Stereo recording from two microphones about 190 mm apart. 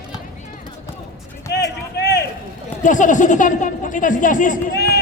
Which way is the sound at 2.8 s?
40° left (ahead or behind).